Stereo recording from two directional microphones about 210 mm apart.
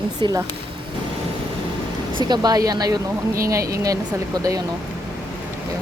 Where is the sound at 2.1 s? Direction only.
20° right (ahead or behind).